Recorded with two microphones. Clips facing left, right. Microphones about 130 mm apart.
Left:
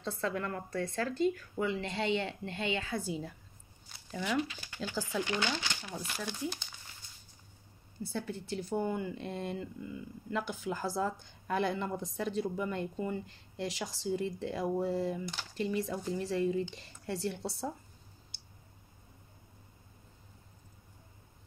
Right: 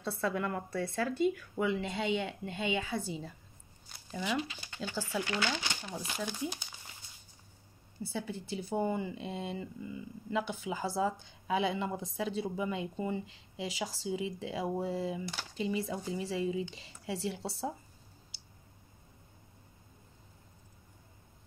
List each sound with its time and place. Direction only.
0.0 s speech: 10° right (ahead or behind)
3.0 s speech: centre (ahead or behind)
3.9 s a sound: centre (ahead or behind)
4.3 s speech: centre (ahead or behind)
5.2 s speech: 15° left (ahead or behind)
5.9 s speech: centre (ahead or behind)
8.0 s speech: 5° right (ahead or behind)